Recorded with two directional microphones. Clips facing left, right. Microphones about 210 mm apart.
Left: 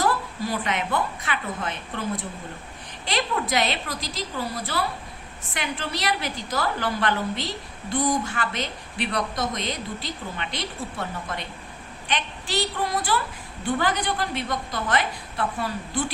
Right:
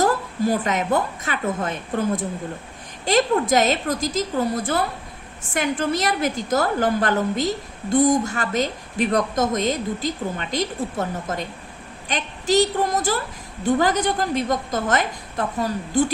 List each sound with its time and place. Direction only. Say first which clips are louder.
0.0 s a woman's voice: right 5 dB; 45° right (ahead or behind)